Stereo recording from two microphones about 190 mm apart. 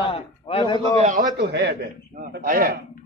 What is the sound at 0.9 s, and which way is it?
Speech, 40° right (ahead or behind).